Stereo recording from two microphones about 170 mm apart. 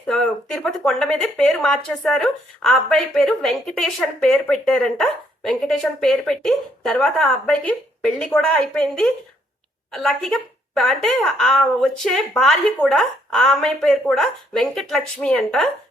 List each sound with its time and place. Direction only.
0.0 s speech: 5° left (ahead or behind)